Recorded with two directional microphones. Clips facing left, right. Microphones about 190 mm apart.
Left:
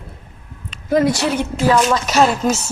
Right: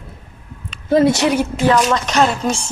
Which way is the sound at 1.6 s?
5° left (ahead or behind).